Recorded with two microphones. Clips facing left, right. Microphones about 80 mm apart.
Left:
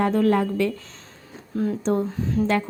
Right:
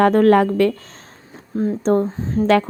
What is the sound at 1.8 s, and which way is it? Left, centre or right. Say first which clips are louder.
Speech: right 7 dB; right.